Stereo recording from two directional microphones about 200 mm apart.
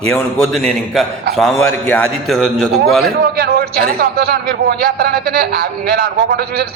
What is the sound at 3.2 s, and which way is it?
A man's voice, 55° right (ahead or behind).